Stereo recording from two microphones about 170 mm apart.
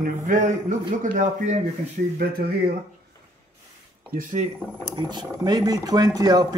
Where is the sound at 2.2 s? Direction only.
65° right (ahead or behind).